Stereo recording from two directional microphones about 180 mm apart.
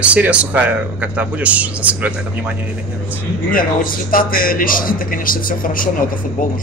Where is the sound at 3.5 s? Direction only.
50° left (ahead or behind).